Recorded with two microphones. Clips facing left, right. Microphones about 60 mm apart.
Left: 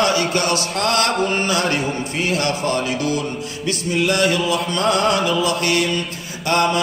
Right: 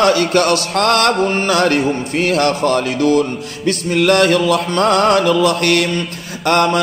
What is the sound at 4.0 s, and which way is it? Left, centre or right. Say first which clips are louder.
Mantra: right 6 dB; right.